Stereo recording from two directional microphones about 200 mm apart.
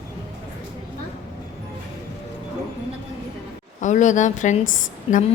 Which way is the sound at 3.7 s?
40° left (ahead or behind).